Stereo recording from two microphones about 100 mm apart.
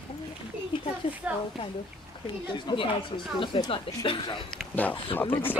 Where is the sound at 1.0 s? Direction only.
60° left (ahead or behind).